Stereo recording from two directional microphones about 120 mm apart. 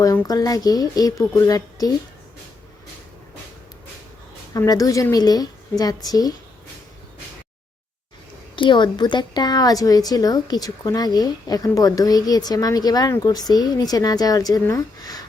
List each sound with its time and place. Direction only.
0.0 s a woman's voice: 25° left (ahead or behind)
4.5 s a woman's voice: 30° left (ahead or behind)
8.5 s a woman's voice: 40° left (ahead or behind)
14.7 s a sound: 30° left (ahead or behind)